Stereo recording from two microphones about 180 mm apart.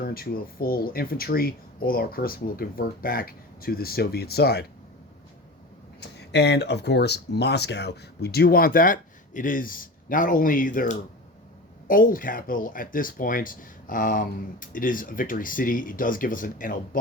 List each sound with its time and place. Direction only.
0.0 s speech: 55° left (ahead or behind)
6.0 s speech: 70° left (ahead or behind); by 17.0 s 50° left (ahead or behind)